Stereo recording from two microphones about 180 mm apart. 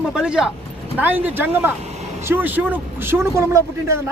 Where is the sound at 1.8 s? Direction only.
35° right (ahead or behind).